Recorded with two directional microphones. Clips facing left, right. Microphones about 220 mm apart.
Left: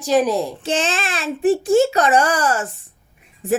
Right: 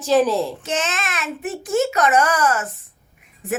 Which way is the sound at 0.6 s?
30° left (ahead or behind).